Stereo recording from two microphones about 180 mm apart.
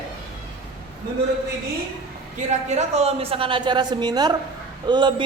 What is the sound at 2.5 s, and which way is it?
A man's voice, 40° right (ahead or behind).